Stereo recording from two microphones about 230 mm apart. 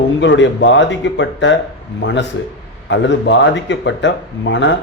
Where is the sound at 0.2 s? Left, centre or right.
Left.